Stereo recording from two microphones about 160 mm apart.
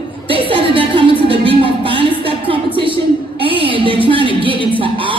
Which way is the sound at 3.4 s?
30° right (ahead or behind).